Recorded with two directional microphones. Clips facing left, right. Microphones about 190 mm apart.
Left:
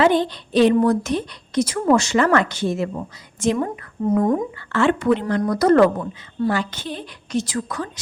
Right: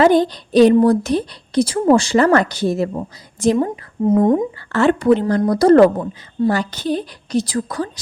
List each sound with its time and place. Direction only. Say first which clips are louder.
0.0 s a woman's voice: right 4 dB; 40° right (ahead or behind)
4.0 s speech: right 4 dB; 25° right (ahead or behind)
4.7 s a woman's voice: right 4 dB; 40° right (ahead or behind)